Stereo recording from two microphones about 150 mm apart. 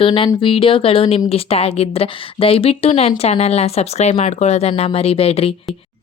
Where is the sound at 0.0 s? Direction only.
35° left (ahead or behind).